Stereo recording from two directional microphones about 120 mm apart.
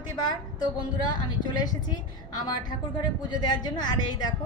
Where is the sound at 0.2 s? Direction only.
35° left (ahead or behind).